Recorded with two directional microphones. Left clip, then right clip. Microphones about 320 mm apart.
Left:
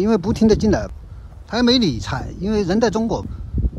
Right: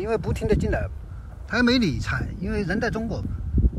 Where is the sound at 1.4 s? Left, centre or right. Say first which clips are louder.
Left 4 dB; centre.